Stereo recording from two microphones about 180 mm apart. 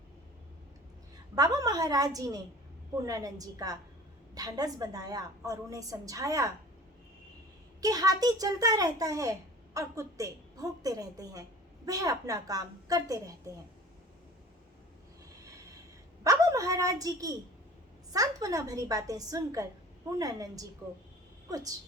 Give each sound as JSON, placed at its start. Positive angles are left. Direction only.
{"t": 1.4, "sound": "a woman's voice", "side_deg": -20}
{"t": 7.8, "sound": "a woman's voice", "side_deg": -20}
{"t": 16.2, "sound": "a woman's voice", "side_deg": -20}